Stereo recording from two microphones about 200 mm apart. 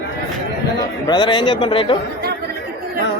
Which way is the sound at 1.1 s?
25° left (ahead or behind).